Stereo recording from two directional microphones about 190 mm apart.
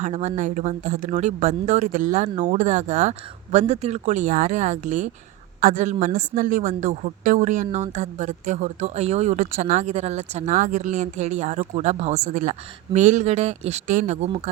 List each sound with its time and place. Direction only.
0.0 s a woman's voice: 35° right (ahead or behind)